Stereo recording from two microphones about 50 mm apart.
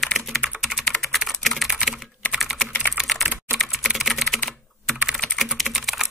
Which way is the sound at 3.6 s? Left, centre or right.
Centre.